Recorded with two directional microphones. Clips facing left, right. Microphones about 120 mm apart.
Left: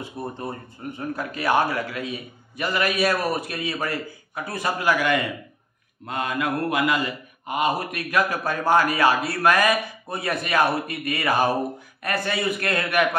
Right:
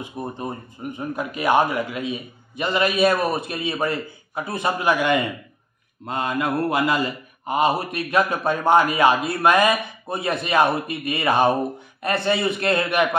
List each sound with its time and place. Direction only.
0.0 s a man's voice: 15° right (ahead or behind)